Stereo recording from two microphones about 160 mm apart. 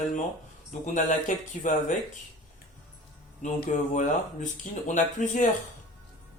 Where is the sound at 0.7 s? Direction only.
50° left (ahead or behind).